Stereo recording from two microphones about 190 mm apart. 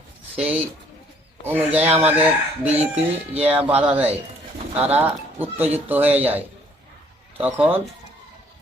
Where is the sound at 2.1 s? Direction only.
10° right (ahead or behind).